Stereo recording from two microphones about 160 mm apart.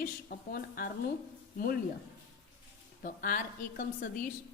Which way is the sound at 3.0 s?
60° left (ahead or behind).